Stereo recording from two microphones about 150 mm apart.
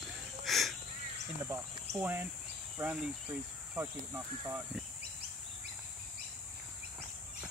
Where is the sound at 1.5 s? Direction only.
15° right (ahead or behind).